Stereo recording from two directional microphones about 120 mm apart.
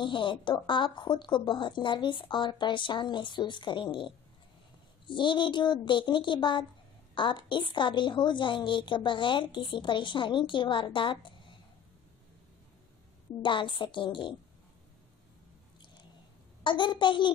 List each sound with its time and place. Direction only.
0.0 s a woman's voice: 45° left (ahead or behind)
13.4 s a woman's voice: 40° left (ahead or behind)
16.6 s a woman's voice: 40° left (ahead or behind)